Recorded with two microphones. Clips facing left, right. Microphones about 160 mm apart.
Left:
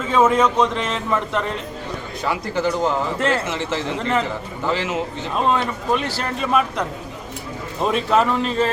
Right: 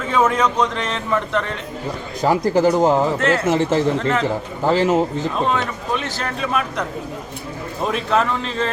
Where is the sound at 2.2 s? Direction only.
40° right (ahead or behind).